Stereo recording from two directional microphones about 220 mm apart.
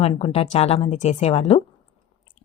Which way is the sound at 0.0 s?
25° left (ahead or behind).